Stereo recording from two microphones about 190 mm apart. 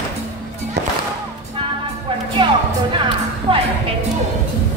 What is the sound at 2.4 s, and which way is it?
Music, 25° right (ahead or behind).